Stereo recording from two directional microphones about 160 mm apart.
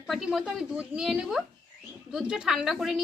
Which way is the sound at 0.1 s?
5° right (ahead or behind).